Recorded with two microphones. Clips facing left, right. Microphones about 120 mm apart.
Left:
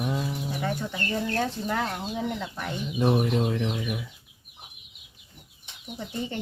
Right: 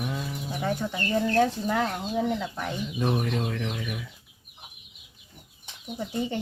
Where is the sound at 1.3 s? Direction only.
Centre (ahead or behind).